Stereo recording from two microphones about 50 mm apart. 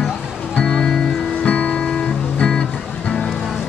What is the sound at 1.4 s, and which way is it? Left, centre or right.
Music, left.